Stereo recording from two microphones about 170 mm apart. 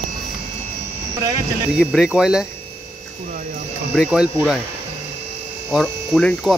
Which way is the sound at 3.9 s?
Centre (ahead or behind).